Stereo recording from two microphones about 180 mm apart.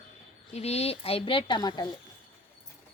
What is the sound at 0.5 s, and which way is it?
Speech, 35° left (ahead or behind).